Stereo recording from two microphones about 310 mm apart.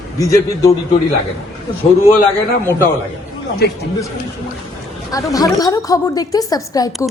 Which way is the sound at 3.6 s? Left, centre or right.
Left.